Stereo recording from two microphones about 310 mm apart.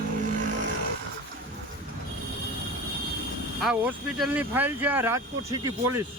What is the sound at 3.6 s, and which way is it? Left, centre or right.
Speech, centre.